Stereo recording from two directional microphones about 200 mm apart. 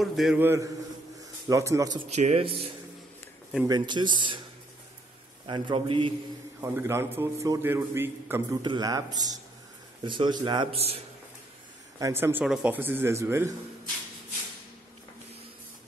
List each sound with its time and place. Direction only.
0.0 s a man's voice: centre (ahead or behind); by 2.0 s 20° right (ahead or behind)
2.0 s a man's voice: 35° right (ahead or behind)
5.5 s a man's voice: 25° right (ahead or behind)
6.6 s a man's voice: 10° right (ahead or behind); by 11.0 s 30° right (ahead or behind)
12.0 s a man's voice: 10° right (ahead or behind)